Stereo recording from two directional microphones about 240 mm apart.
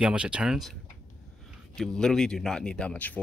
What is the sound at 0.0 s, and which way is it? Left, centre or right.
Speech, centre.